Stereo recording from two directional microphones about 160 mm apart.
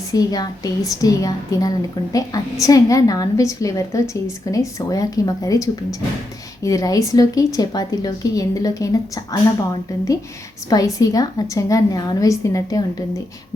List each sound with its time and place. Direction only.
0.1 s a woman's voice: 25° left (ahead or behind)
10.7 s a woman's voice: 20° left (ahead or behind)